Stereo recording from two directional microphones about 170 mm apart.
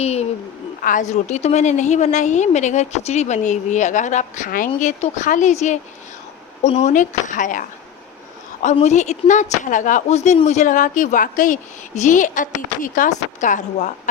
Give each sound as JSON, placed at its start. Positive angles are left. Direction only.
{"t": 0.0, "sound": "a woman's voice", "side_deg": 40}
{"t": 0.8, "sound": "speech", "side_deg": 50}
{"t": 8.7, "sound": "speech", "side_deg": 40}